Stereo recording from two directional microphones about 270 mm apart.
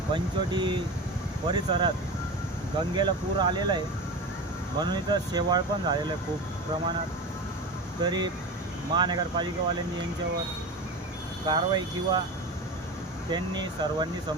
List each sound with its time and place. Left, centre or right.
0.1 s speech: centre
2.9 s speech: centre
8.0 s speech: centre
11.4 s speech: centre
13.3 s speech: centre